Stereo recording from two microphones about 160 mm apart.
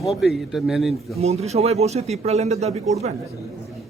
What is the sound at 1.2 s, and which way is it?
Speech, 40° right (ahead or behind).